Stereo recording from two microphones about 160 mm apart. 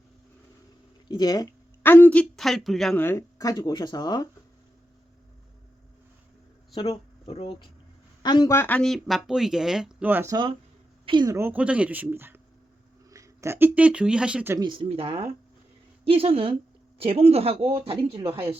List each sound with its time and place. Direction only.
1.0 s speech: 25° left (ahead or behind)
1.8 s speech: 10° left (ahead or behind)
3.0 s speech: 15° left (ahead or behind)
6.8 s speech: 35° left (ahead or behind)
8.2 s speech: 25° left (ahead or behind); by 10.3 s 10° right (ahead or behind)
11.0 s a woman's voice: 30° right (ahead or behind)
11.3 s speech: 10° right (ahead or behind)
14.5 s a woman's voice: 30° right (ahead or behind)